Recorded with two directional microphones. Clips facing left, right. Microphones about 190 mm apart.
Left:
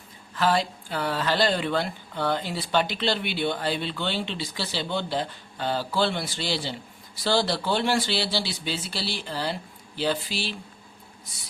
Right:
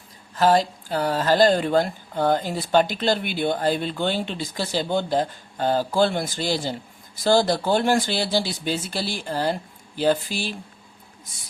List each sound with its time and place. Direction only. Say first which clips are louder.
0.3 s speech: right 5 dB; 40° right (ahead or behind)